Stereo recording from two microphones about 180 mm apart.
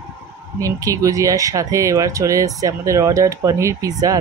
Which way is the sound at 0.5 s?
20° right (ahead or behind).